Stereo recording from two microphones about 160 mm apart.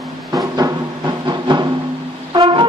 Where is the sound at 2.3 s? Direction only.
30° right (ahead or behind).